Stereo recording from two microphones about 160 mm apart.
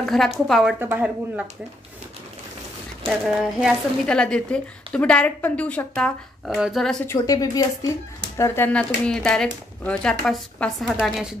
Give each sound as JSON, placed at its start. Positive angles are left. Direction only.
{"t": 0.0, "sound": "a sound", "side_deg": 0}
{"t": 0.5, "sound": "speech", "side_deg": 0}
{"t": 0.7, "sound": "a woman's voice", "side_deg": -10}
{"t": 3.1, "sound": "speech", "side_deg": -5}
{"t": 7.1, "sound": "speech", "side_deg": 20}